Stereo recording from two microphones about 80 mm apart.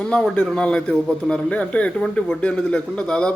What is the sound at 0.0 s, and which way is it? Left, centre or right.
A man's voice, centre.